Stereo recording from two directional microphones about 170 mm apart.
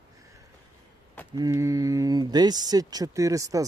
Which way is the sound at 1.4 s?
15° right (ahead or behind).